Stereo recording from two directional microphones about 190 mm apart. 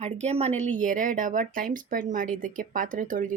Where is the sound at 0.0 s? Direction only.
35° right (ahead or behind).